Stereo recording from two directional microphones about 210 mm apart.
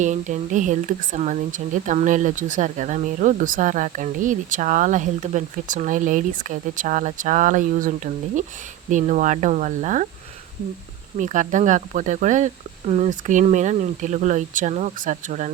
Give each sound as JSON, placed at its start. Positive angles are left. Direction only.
{"t": 0.0, "sound": "speech", "side_deg": -35}
{"t": 11.2, "sound": "speech", "side_deg": -35}